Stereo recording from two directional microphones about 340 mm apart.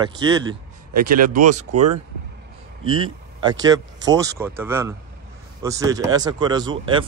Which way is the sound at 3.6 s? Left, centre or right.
Centre.